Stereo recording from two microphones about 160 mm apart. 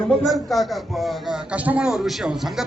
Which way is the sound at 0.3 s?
Centre (ahead or behind).